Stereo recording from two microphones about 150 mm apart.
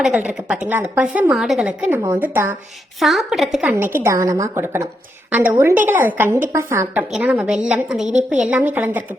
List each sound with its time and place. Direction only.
0.0 s a woman's voice: 5° right (ahead or behind)
3.0 s a woman's voice: centre (ahead or behind)
3.7 s a woman's voice: 15° right (ahead or behind)
7.1 s a woman's voice: 5° right (ahead or behind)